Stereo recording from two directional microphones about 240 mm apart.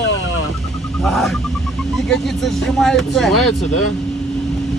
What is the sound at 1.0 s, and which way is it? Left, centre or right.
Speech, centre.